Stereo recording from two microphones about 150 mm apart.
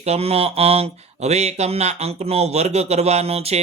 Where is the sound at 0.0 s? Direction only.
45° right (ahead or behind).